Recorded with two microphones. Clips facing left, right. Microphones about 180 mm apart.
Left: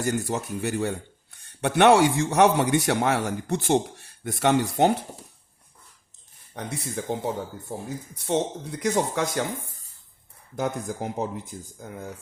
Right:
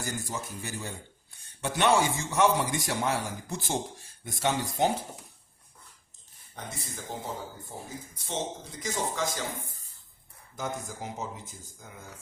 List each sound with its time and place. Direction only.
0.0 s a man's voice: 65° left (ahead or behind)
6.5 s a man's voice: 70° left (ahead or behind)
10.6 s speech: 60° left (ahead or behind)